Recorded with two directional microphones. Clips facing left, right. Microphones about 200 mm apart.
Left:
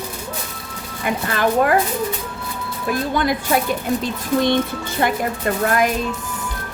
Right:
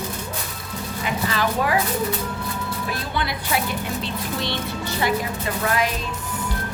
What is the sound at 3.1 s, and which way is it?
Speech, 45° left (ahead or behind).